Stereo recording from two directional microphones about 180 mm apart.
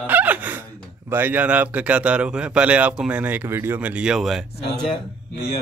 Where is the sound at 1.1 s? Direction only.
10° right (ahead or behind).